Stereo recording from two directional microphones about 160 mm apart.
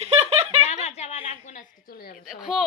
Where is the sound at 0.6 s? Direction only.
45° left (ahead or behind).